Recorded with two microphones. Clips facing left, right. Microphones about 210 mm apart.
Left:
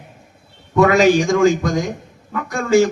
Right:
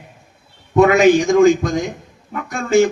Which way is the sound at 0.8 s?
20° right (ahead or behind).